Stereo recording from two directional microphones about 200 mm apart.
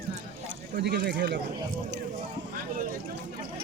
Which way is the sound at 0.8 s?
55° right (ahead or behind).